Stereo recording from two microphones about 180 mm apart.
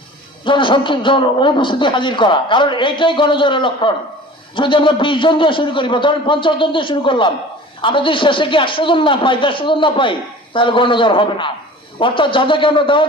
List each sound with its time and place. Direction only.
0.4 s a man's voice: 25° left (ahead or behind)